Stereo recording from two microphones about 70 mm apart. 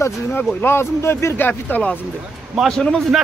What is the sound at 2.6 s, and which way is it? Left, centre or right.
Speech, centre.